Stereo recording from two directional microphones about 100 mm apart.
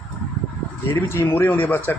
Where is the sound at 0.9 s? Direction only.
25° left (ahead or behind).